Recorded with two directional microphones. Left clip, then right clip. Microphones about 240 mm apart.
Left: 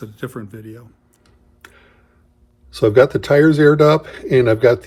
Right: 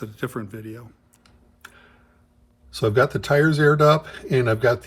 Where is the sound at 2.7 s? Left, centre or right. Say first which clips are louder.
Left 7 dB; centre.